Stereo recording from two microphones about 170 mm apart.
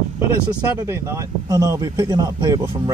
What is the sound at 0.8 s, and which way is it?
Speech, 15° right (ahead or behind).